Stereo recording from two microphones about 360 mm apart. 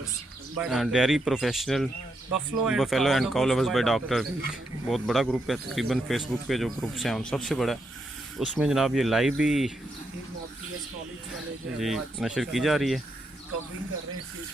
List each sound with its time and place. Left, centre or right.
0.6 s speech: centre
11.8 s speech: centre